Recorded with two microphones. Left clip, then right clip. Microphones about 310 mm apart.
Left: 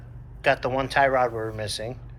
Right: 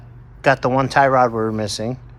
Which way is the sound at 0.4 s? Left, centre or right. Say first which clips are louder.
Right 7 dB; right.